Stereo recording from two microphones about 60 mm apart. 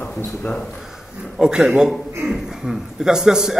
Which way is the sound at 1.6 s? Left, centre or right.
Right.